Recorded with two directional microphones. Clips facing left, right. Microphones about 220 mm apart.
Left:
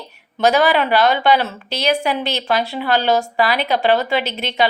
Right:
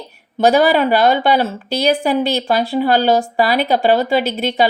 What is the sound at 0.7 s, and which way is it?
A woman's voice, 45° right (ahead or behind).